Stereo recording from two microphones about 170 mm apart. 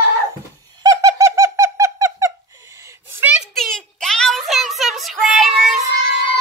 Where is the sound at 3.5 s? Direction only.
Centre (ahead or behind).